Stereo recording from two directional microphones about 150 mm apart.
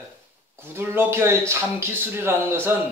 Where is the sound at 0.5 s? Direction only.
15° right (ahead or behind).